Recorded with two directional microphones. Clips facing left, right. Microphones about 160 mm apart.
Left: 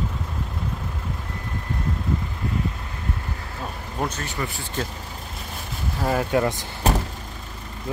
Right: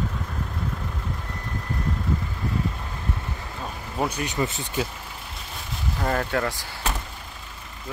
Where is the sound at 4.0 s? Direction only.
10° right (ahead or behind).